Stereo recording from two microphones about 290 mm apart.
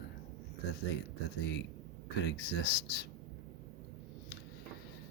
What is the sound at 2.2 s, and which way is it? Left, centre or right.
Speech, left.